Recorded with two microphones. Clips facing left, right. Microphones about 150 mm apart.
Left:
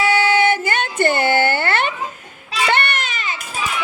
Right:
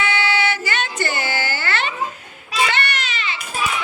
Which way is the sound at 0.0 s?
40° left (ahead or behind).